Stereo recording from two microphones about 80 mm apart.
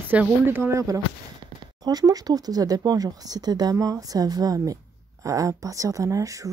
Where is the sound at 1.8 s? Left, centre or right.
Right.